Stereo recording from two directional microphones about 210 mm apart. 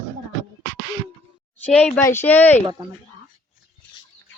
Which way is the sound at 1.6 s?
5° left (ahead or behind).